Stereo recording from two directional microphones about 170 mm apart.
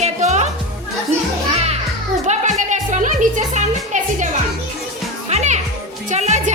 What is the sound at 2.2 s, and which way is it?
Music, 45° right (ahead or behind).